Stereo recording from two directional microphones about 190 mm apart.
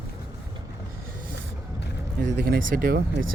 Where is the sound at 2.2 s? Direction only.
65° right (ahead or behind); by 3.0 s 50° right (ahead or behind).